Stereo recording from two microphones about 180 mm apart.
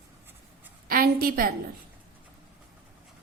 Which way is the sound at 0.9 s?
55° right (ahead or behind).